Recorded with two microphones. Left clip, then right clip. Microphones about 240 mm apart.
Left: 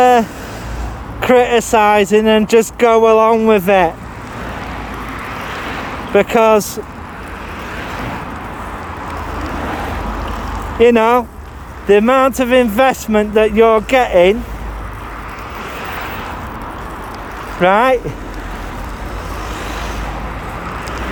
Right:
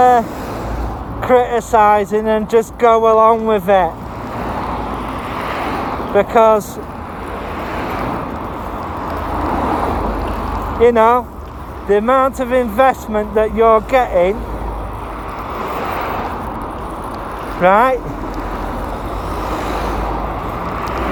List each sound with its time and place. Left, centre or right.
0.0 s vehicle: left
1.2 s speech: left
5.4 s vehicle: centre
6.1 s speech: left
9.6 s vehicle: centre
10.8 s speech: left
15.7 s vehicle: centre
17.6 s speech: left
19.5 s vehicle: centre